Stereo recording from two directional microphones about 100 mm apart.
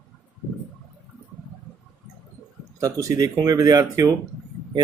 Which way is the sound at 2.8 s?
35° right (ahead or behind).